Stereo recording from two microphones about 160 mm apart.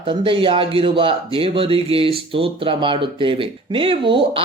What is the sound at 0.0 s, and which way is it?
Speech, 30° right (ahead or behind).